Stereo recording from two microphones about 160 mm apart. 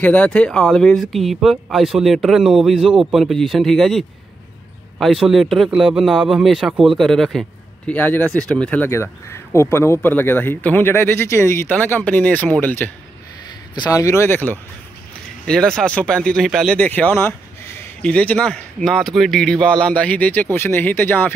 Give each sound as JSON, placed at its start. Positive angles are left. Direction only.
{"t": 0.0, "sound": "speech", "side_deg": 10}
{"t": 13.7, "sound": "speech", "side_deg": 20}